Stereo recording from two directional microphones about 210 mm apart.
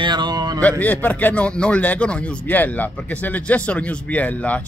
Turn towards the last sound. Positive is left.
turn(degrees=5)  # may be behind; listen again after turning